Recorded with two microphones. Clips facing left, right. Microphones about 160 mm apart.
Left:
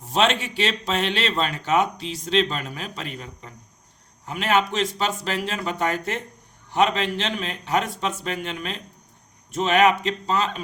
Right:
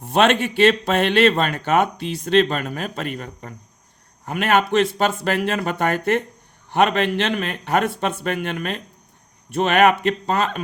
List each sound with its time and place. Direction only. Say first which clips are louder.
0.0 s speech: right 5 dB; 60° right (ahead or behind)